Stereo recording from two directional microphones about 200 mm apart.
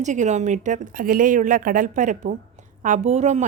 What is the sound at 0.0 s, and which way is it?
Speech, 35° right (ahead or behind).